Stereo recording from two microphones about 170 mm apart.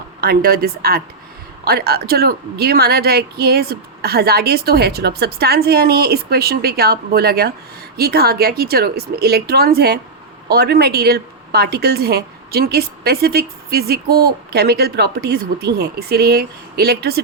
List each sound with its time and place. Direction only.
0.2 s a woman's voice: 65° right (ahead or behind)